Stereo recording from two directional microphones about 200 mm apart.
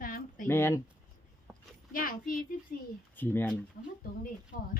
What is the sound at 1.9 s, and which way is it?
Speech, 45° left (ahead or behind).